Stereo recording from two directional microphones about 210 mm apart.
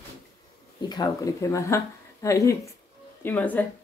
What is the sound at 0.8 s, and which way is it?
A woman's voice, 15° left (ahead or behind).